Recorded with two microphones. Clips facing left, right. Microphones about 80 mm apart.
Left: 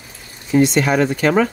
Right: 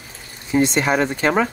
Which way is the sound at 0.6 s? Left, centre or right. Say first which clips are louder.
Left 2 dB; right.